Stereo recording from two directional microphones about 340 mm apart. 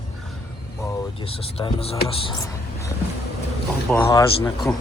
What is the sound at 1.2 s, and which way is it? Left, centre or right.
Speech, centre.